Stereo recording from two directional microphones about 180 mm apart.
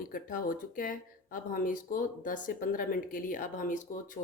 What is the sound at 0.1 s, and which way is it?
Speech, 50° left (ahead or behind).